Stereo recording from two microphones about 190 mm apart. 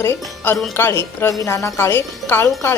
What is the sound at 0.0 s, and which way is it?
A woman's voice, 10° left (ahead or behind).